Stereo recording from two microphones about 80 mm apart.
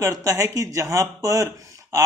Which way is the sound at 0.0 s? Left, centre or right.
Right.